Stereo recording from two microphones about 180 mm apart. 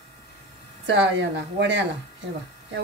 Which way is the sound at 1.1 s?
80° right.